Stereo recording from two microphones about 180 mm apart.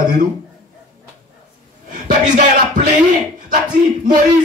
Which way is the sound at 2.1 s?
45° right (ahead or behind).